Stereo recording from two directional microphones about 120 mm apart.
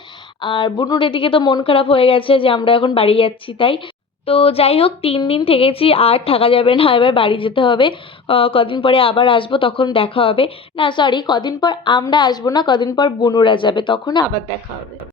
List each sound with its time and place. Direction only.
0.4 s a woman's voice: 40° left (ahead or behind)